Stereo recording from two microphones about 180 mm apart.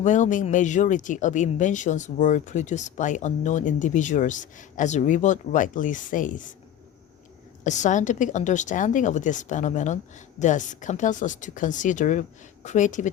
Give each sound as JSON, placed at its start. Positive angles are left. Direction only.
{"t": 0.0, "sound": "speech", "side_deg": 45}
{"t": 7.6, "sound": "speech", "side_deg": 45}